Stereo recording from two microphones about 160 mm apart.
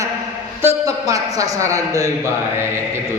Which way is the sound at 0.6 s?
20° right (ahead or behind).